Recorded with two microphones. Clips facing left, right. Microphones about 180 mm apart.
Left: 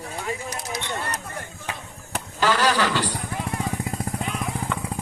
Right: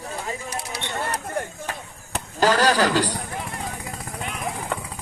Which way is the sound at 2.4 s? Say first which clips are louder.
Right 3 dB; 40° right (ahead or behind).